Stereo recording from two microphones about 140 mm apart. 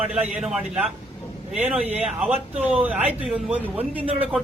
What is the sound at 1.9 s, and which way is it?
Speech, 45° right (ahead or behind).